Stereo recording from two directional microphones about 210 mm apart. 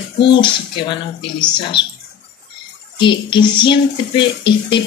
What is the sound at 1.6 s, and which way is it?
Speech, 25° left (ahead or behind).